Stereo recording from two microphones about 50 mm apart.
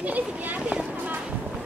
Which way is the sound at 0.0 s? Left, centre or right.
Right.